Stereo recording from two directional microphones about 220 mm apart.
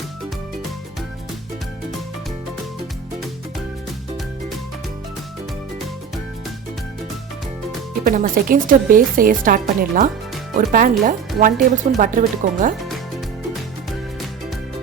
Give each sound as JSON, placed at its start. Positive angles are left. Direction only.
{"t": 8.0, "sound": "speech", "side_deg": -40}